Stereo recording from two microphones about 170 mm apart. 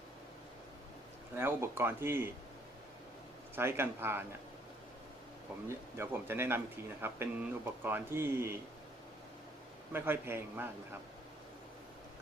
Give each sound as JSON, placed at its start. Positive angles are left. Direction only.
{"t": 1.4, "sound": "a man's voice", "side_deg": -15}
{"t": 3.5, "sound": "a man's voice", "side_deg": -15}
{"t": 5.6, "sound": "a man's voice", "side_deg": -15}
{"t": 9.9, "sound": "a man's voice", "side_deg": -15}